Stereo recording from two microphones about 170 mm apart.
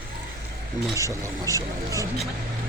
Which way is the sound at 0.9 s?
20° right (ahead or behind).